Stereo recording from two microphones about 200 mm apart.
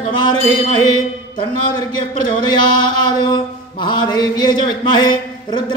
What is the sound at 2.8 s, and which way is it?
Mantra, 20° left (ahead or behind).